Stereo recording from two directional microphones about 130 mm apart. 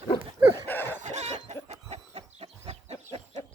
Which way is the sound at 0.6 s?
15° left (ahead or behind).